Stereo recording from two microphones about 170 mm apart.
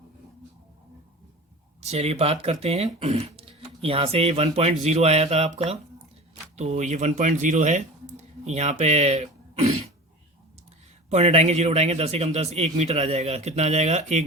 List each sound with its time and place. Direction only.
1.8 s speech: 40° right (ahead or behind)
11.1 s speech: 40° right (ahead or behind)